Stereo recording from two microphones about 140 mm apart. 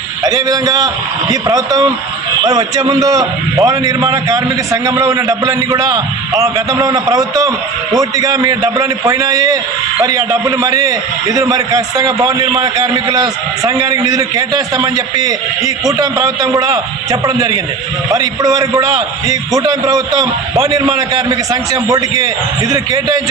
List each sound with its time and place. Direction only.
0.3 s a man's voice: 25° right (ahead or behind)